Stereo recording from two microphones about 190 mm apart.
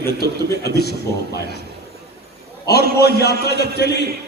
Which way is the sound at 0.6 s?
55° left (ahead or behind).